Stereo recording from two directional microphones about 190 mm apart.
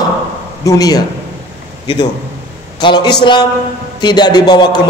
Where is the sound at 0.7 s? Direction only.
20° left (ahead or behind).